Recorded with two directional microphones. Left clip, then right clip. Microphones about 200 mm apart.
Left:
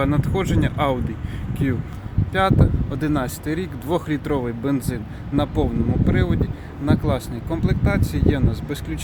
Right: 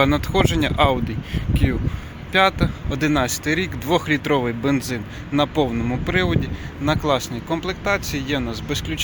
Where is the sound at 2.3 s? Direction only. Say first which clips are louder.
Right 3 dB; 5° left (ahead or behind).